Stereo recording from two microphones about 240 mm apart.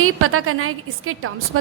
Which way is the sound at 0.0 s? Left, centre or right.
Right.